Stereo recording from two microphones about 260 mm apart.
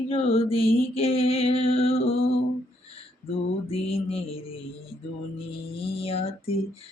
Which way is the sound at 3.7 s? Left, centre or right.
Left.